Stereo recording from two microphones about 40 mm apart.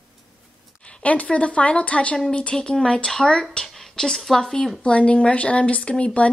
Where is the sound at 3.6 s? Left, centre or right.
Centre.